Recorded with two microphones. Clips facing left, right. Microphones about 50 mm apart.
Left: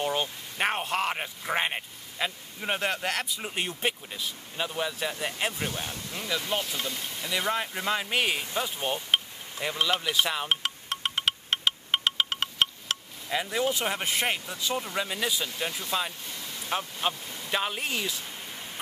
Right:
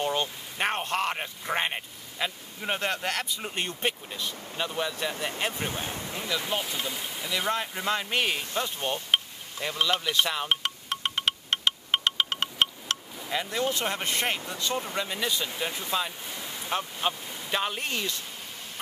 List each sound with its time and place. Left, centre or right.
0.0 s speech: centre
5.9 s speech: right
6.5 s speech: centre
7.3 s speech: centre
8.5 s a sound: centre
14.6 s speech: centre
16.3 s a sound: centre
16.6 s speech: centre